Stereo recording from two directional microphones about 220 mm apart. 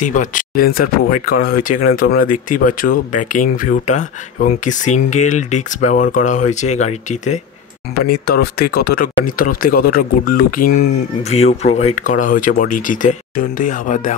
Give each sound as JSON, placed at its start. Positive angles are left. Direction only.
{"t": 0.0, "sound": "speech", "side_deg": 35}
{"t": 2.2, "sound": "speech", "side_deg": 90}
{"t": 2.6, "sound": "speech", "side_deg": 40}
{"t": 7.9, "sound": "speech", "side_deg": 45}
{"t": 11.2, "sound": "speech", "side_deg": 30}